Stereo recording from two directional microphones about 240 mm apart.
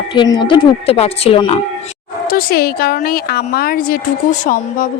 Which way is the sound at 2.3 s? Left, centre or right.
Left.